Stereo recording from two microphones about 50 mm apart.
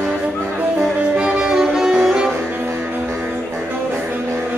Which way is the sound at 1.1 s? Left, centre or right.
Centre.